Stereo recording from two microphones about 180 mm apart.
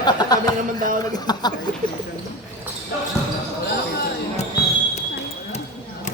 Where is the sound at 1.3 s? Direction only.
25° left (ahead or behind).